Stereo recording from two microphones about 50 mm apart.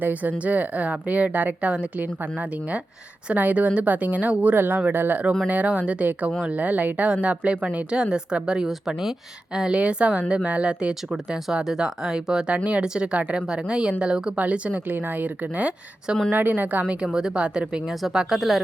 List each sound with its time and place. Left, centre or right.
0.0 s a woman's voice: right
3.3 s a woman's voice: right
7.9 s a woman's voice: centre
9.6 s a woman's voice: right
12.5 s speech: right
12.8 s a woman's voice: centre
14.8 s a woman's voice: right
17.1 s a woman's voice: centre
18.3 s speech: centre